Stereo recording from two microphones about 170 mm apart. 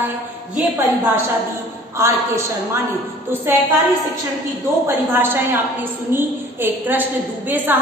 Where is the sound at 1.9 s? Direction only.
15° right (ahead or behind).